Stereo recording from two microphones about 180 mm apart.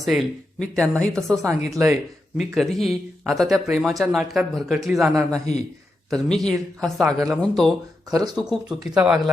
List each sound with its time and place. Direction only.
0.0 s speech: centre (ahead or behind)
1.5 s speech: 15° right (ahead or behind)
2.4 s speech: centre (ahead or behind)